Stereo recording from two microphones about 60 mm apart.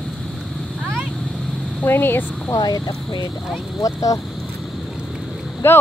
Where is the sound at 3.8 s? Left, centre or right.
Left.